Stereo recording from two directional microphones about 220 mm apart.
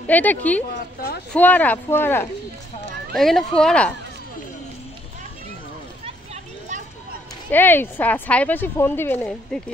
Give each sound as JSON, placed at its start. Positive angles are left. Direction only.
{"t": 0.0, "sound": "a woman's voice", "side_deg": 5}
{"t": 6.0, "sound": "a sound", "side_deg": -30}
{"t": 7.5, "sound": "a woman's voice", "side_deg": 10}